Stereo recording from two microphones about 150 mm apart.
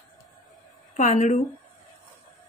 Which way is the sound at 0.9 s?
55° left (ahead or behind).